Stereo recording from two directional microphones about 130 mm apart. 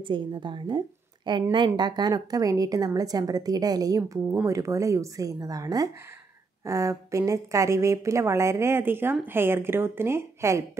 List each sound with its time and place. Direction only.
0.0 s a woman's voice: 40° right (ahead or behind); by 10.6 s 20° right (ahead or behind)